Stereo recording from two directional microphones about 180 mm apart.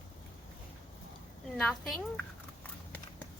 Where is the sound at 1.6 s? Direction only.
Centre (ahead or behind).